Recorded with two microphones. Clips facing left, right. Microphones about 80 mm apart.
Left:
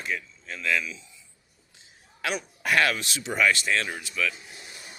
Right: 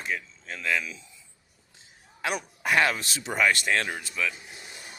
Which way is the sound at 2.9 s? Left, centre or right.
Right.